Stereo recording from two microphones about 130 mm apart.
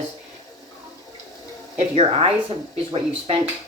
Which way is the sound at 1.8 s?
50° right (ahead or behind).